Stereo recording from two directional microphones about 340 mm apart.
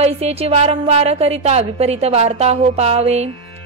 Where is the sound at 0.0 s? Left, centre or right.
Centre.